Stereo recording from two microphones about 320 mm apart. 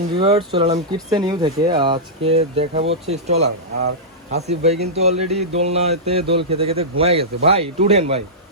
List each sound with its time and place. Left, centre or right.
0.2 s speech: centre